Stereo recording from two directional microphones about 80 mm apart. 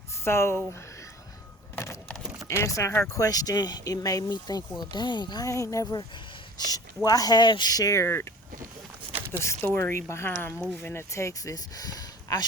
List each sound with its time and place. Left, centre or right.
0.3 s speech: left
1.7 s a sound: left
2.5 s speech: left
4.8 s speech: left
5.5 s speech: left
5.8 s speech: left
7.7 s speech: left
8.0 s speech: left
9.6 s speech: left